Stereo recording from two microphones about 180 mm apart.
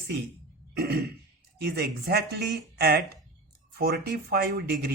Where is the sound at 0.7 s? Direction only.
60° right (ahead or behind).